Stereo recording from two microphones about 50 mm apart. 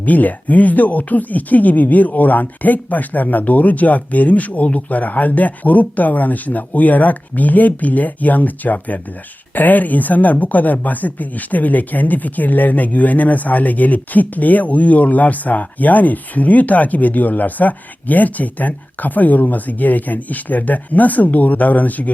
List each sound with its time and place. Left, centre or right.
0.0 s speech: left